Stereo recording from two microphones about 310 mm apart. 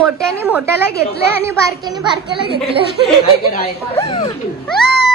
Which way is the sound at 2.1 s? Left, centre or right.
Left.